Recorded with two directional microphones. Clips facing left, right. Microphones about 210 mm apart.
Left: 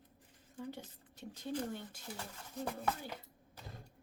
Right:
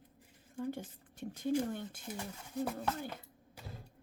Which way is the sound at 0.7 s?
50° right (ahead or behind).